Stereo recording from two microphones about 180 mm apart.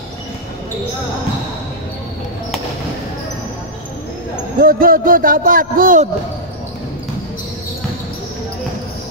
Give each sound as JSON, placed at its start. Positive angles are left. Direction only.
{"t": 4.6, "sound": "a man's voice", "side_deg": -55}